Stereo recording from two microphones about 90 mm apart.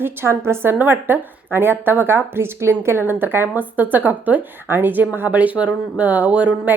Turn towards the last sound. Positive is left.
turn(degrees=-15)  # may be behind; listen again after turning